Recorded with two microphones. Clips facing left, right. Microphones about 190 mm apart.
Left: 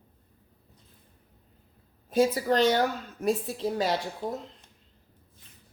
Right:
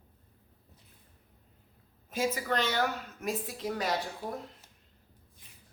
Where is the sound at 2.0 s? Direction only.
35° left (ahead or behind).